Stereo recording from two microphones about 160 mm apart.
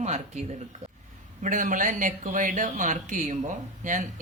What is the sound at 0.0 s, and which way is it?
Speech, 45° right (ahead or behind).